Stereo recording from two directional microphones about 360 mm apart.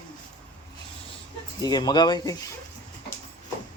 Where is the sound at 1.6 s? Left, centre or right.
Centre.